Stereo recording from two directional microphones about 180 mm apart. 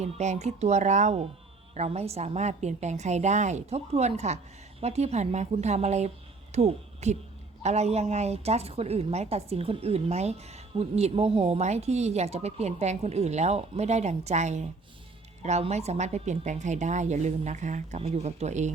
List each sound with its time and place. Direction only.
0.0 s speech: 40° right (ahead or behind)